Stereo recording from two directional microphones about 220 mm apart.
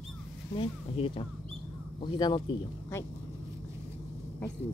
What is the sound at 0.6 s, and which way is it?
Speech, 25° left (ahead or behind).